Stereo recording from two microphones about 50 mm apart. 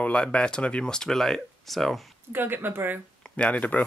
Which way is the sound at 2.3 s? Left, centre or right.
Right.